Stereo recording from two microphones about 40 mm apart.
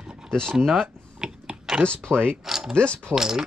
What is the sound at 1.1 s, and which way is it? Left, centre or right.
Chewing, centre.